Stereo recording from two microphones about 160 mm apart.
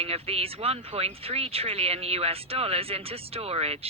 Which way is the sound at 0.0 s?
40° right (ahead or behind).